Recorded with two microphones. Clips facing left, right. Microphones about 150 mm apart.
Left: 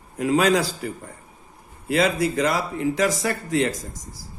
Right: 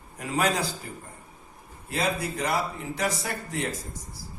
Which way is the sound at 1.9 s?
90° left.